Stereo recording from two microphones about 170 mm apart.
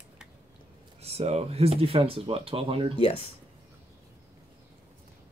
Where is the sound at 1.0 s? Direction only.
35° right (ahead or behind).